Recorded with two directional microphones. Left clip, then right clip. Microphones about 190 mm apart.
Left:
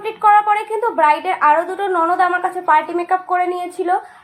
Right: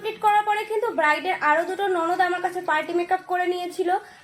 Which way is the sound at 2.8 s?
25° left (ahead or behind).